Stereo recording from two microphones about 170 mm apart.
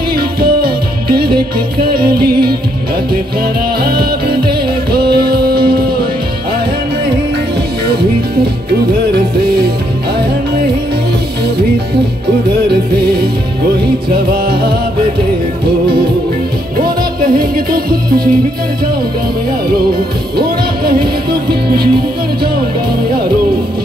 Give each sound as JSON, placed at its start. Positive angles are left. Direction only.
{"t": 0.4, "sound": "music", "side_deg": -65}
{"t": 3.8, "sound": "music", "side_deg": -65}
{"t": 9.1, "sound": "music", "side_deg": -70}
{"t": 14.3, "sound": "music", "side_deg": -65}
{"t": 16.8, "sound": "music", "side_deg": -60}
{"t": 20.3, "sound": "music", "side_deg": -65}